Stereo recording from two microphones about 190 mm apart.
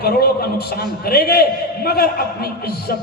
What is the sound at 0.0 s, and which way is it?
A man's voice, 55° left (ahead or behind).